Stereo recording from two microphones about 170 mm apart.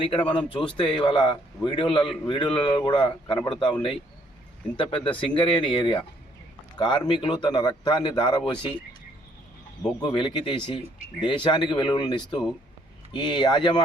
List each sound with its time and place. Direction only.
0.0 s a man's voice: 30° left (ahead or behind)
5.1 s a man's voice: 30° left (ahead or behind)
9.8 s a man's voice: 25° left (ahead or behind)